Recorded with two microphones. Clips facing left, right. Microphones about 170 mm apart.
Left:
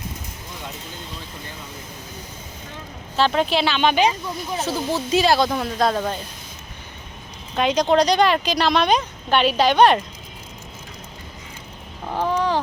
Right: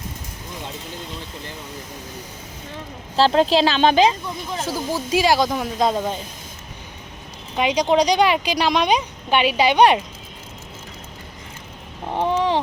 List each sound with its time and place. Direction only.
3.2 s speech: 35° right (ahead or behind)
4.6 s speech: 10° right (ahead or behind)
7.5 s speech: 10° right (ahead or behind)
12.1 s a sound: 25° right (ahead or behind)